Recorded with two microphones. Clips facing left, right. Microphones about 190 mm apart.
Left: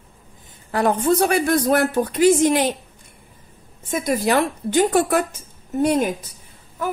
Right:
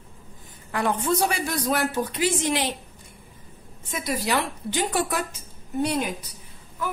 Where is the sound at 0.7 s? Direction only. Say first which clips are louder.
Left 6 dB; 40° left (ahead or behind).